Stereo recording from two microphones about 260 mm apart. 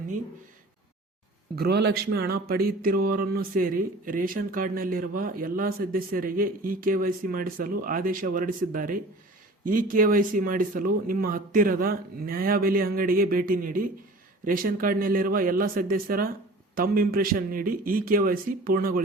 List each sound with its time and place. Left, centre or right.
1.5 s speech: right